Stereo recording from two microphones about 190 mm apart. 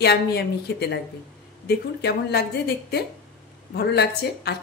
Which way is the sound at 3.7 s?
60° left (ahead or behind).